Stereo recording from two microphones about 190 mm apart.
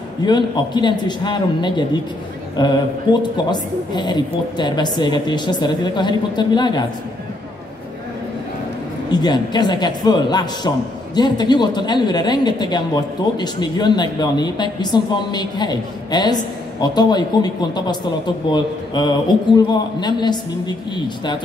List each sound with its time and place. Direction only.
0.2 s speech: 25° left (ahead or behind)
9.1 s speech: 20° left (ahead or behind)